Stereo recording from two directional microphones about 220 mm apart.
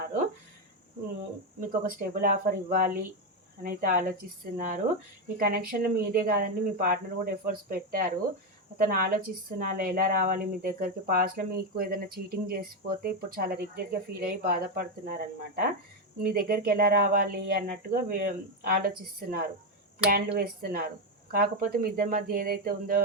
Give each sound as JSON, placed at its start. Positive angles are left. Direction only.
{"t": 1.6, "sound": "speech", "side_deg": -40}